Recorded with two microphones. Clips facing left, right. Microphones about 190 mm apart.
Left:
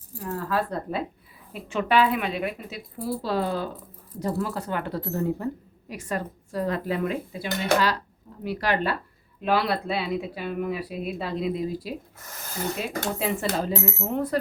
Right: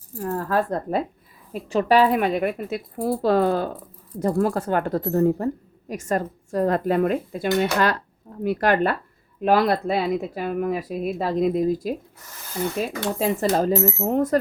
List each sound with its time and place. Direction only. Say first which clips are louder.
0.2 s speech: right 4 dB; 50° right (ahead or behind)
13.1 s speech: right 8 dB; 40° right (ahead or behind)